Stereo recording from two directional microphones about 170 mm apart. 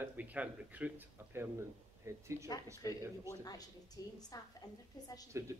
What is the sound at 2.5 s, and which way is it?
A woman's voice, 20° left (ahead or behind).